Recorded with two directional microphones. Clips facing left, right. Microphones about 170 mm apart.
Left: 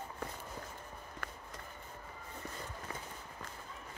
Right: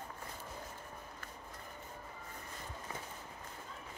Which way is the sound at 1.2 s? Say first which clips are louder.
Left 4 dB; 75° left (ahead or behind).